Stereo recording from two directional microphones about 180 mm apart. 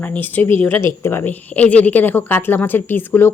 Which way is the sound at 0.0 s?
10° left (ahead or behind).